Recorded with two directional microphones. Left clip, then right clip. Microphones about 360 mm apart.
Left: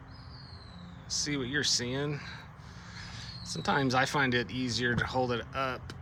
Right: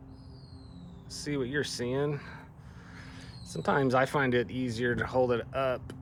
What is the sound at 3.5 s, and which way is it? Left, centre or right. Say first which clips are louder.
Speech: right 2 dB; centre.